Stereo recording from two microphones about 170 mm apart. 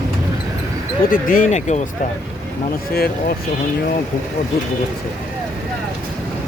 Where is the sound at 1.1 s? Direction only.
50° left (ahead or behind).